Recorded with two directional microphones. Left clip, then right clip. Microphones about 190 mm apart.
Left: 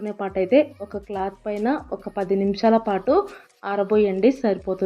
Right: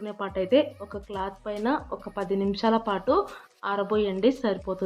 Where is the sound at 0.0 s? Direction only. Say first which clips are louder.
Left 5 dB; 15° left (ahead or behind).